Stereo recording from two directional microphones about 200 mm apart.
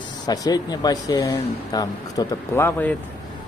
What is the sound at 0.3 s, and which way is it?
Speech, 20° left (ahead or behind).